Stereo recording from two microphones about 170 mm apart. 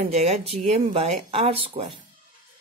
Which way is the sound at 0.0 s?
35° right (ahead or behind).